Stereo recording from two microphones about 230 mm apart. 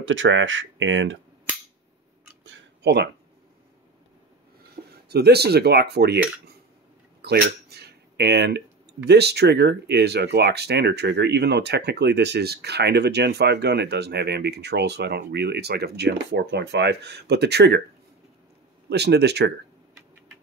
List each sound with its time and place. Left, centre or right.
0.0 s speech: right
2.4 s a sound: right
5.0 s speech: right
7.2 s speech: right
18.9 s speech: right